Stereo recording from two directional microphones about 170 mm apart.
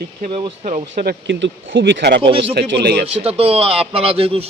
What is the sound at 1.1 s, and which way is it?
Speech, 90° right.